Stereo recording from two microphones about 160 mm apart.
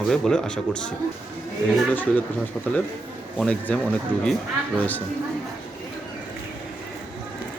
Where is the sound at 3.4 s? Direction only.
5° left (ahead or behind).